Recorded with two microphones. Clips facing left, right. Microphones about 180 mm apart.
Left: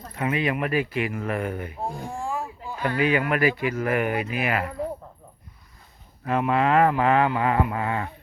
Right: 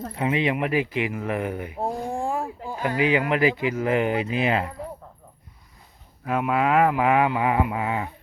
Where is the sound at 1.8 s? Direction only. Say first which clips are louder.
Right 7 dB; 60° right (ahead or behind).